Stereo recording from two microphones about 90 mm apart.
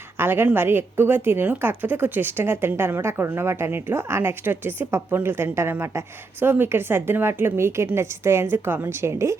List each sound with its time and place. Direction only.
0.2 s a woman's voice: 25° right (ahead or behind)